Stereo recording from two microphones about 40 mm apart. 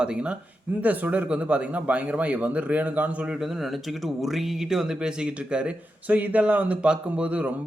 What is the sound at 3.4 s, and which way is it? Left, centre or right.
Speech, centre.